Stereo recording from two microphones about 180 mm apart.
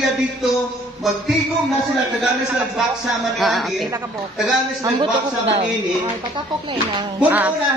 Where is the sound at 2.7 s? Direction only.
Centre (ahead or behind).